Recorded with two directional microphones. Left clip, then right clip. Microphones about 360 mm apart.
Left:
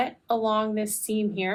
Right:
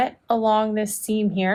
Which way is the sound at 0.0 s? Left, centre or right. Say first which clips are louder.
Right 5 dB; right.